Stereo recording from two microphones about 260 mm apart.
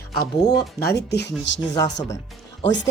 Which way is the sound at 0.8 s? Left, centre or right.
Left.